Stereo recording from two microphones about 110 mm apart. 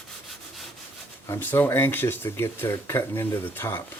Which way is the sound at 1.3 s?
20° left (ahead or behind).